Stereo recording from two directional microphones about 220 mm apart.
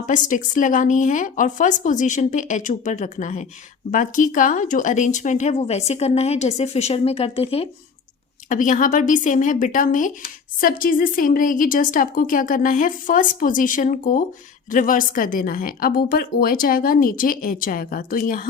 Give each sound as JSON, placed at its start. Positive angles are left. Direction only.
{"t": 0.0, "sound": "a woman's voice", "side_deg": 35}